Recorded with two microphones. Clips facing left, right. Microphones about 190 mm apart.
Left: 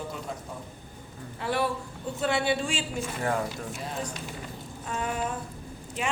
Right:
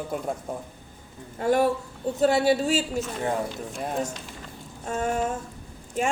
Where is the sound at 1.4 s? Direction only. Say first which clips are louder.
Right 7 dB; 45° right (ahead or behind).